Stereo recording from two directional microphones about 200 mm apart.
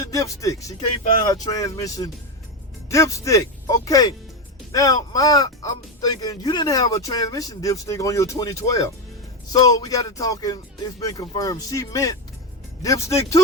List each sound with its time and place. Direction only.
0.0 s speech: 15° left (ahead or behind)